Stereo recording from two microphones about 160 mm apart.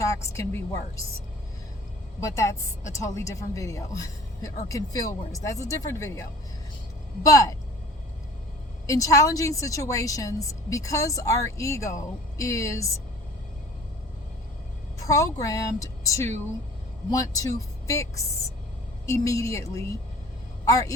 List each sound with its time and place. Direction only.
0.0 s a woman's voice: 20° left (ahead or behind)
2.2 s a woman's voice: 20° left (ahead or behind)
8.9 s a woman's voice: 20° left (ahead or behind)
15.0 s a woman's voice: 20° left (ahead or behind)